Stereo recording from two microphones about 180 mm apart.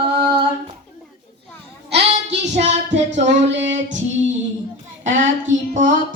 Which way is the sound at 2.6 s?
40° right (ahead or behind).